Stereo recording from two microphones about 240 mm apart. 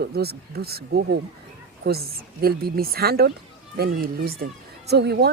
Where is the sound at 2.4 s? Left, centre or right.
Right.